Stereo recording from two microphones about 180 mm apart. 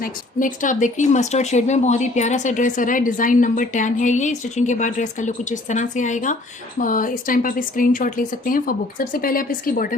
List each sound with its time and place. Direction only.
0.0 s speech: 50° left (ahead or behind)